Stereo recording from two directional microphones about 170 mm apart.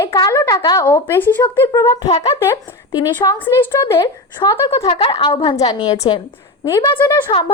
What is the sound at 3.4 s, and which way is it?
Speech, 10° left (ahead or behind).